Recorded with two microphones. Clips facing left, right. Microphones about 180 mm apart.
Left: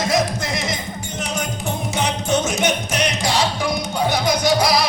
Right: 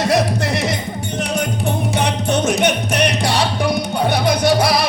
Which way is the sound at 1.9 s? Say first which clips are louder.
Left 1 dB; 60° right (ahead or behind).